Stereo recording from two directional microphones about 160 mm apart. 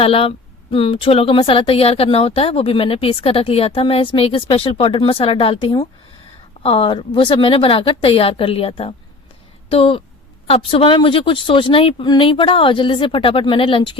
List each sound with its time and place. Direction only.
0.0 s a woman's voice: 35° left (ahead or behind)